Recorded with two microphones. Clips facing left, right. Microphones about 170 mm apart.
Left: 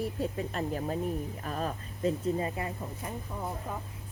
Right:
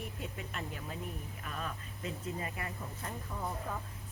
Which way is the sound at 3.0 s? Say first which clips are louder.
Left 4 dB; 15° left (ahead or behind).